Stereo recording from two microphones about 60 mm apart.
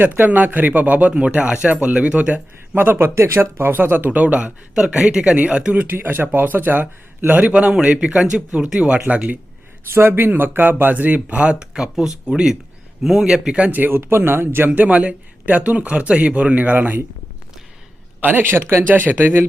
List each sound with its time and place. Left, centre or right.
0.0 s speech: right
5.9 s speech: right
9.9 s speech: right; by 13.7 s centre
13.7 s speech: right
13.9 s speech: right
14.7 s speech: right
18.2 s speech: right